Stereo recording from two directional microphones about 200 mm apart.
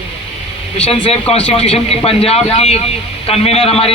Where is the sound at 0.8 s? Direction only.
30° left (ahead or behind).